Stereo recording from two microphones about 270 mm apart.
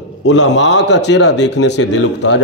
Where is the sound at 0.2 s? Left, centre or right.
Left.